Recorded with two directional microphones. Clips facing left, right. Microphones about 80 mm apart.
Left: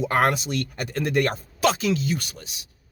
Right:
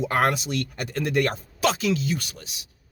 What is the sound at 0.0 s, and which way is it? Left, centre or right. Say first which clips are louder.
Speech: left 1 dB; left.